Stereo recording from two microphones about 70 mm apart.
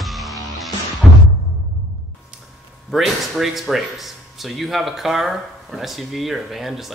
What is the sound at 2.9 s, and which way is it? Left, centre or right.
Speech, centre.